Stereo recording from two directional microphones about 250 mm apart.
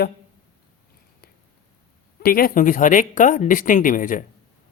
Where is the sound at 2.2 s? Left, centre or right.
Left.